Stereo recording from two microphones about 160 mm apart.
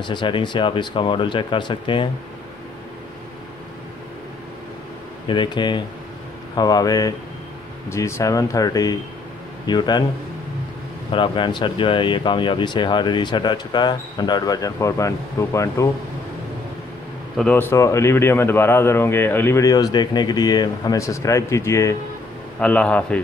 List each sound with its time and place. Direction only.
0.0 s speech: 30° left (ahead or behind)
5.2 s speech: 30° left (ahead or behind)
11.1 s speech: 30° left (ahead or behind)
17.4 s a man's voice: 10° left (ahead or behind)